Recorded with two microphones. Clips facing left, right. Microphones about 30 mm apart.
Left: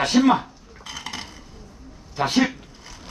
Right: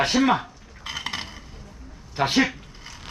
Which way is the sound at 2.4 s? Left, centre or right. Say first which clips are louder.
Even; centre.